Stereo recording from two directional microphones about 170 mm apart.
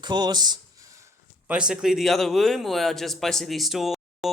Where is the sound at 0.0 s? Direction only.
25° right (ahead or behind).